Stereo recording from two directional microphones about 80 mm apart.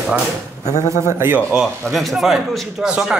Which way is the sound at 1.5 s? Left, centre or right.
Centre.